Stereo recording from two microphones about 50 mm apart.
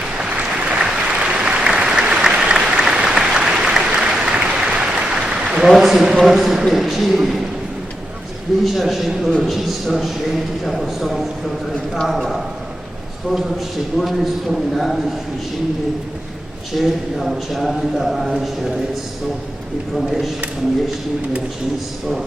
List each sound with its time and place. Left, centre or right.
0.2 s applause: right
5.5 s a sound: centre
6.2 s a man's voice: centre
8.6 s a man's voice: centre
13.3 s a man's voice: centre
16.7 s a man's voice: centre
20.0 s a man's voice: centre